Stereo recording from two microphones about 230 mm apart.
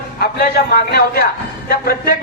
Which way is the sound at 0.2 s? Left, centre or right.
Left.